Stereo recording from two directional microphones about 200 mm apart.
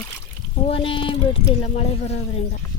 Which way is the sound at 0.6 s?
25° left (ahead or behind).